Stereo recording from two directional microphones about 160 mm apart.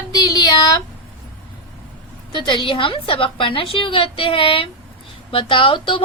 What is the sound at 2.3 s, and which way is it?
A woman's voice, 30° left (ahead or behind).